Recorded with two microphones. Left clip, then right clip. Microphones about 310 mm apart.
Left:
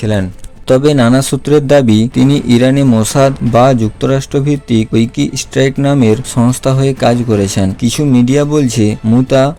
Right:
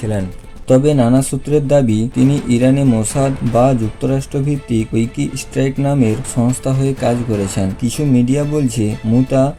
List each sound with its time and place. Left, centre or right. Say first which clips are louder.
0.7 s a man's voice: left 3 dB; left